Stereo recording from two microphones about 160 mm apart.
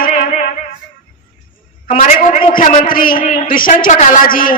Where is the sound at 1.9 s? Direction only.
60° left (ahead or behind).